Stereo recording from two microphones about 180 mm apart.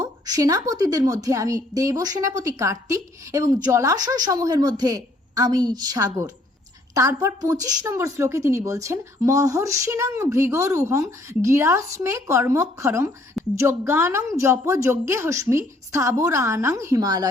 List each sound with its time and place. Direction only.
0.0 s a woman's voice: 20° right (ahead or behind)